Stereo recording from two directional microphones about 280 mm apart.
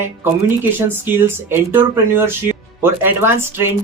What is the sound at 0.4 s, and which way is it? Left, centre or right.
Speech, centre.